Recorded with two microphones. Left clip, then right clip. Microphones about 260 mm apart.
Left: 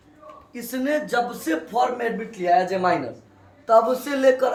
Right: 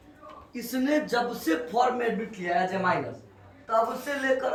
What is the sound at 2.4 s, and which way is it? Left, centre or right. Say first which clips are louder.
Speech: left 7 dB; left.